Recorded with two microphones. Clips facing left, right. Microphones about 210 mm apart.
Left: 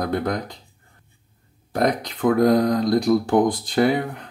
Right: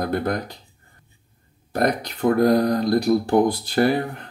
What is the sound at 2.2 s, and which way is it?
Speech, 20° right (ahead or behind).